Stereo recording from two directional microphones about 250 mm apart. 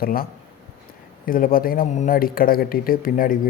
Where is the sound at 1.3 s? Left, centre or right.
Left.